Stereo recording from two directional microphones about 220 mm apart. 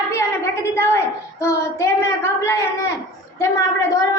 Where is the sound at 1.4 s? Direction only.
10° left (ahead or behind).